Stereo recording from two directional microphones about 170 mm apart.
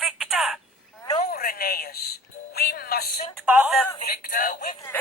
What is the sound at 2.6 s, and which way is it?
Music, 65° left (ahead or behind).